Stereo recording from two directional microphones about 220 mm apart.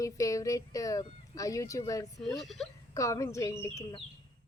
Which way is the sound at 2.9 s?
15° left (ahead or behind).